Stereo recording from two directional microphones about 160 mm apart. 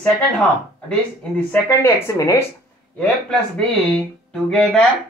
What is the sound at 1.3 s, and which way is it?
Speech, 15° left (ahead or behind).